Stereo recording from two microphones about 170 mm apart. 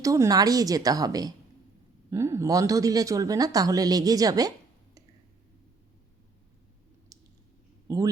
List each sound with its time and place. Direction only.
0.0 s speech: 20° right (ahead or behind)
7.9 s speech: 15° right (ahead or behind)